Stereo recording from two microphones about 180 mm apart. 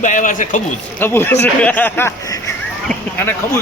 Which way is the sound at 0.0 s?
45° left (ahead or behind).